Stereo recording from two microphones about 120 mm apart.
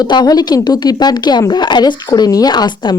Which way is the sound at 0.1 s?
35° left (ahead or behind).